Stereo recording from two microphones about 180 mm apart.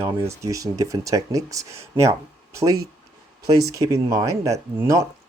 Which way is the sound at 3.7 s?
20° right (ahead or behind).